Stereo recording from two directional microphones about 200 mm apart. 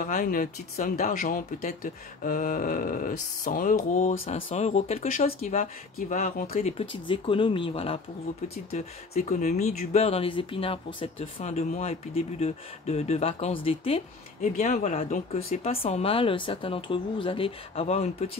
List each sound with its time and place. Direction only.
0.0 s speech: 45° left (ahead or behind)
5.9 s speech: 45° left (ahead or behind)
6.6 s speech: 30° left (ahead or behind)
14.6 s speech: 40° left (ahead or behind)